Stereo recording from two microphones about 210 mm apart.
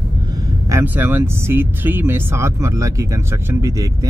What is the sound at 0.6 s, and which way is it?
Speech, 10° right (ahead or behind).